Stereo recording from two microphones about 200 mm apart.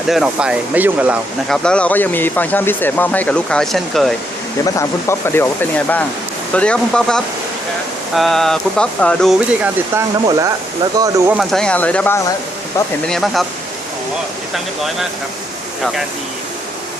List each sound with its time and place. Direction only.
0.1 s speech: 5° right (ahead or behind)
1.6 s speech: 5° left (ahead or behind)
4.6 s speech: 15° left (ahead or behind)
10.2 s speech: 20° right (ahead or behind)
11.3 s speech: 5° left (ahead or behind)